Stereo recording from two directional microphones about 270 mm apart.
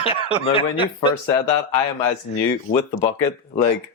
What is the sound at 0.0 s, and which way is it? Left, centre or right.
Speech, left.